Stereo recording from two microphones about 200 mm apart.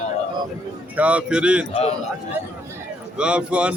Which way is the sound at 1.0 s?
5° right (ahead or behind).